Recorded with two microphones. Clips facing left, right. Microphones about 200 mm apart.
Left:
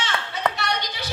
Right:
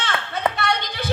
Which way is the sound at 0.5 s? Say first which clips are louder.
Right 4 dB; 55° right (ahead or behind).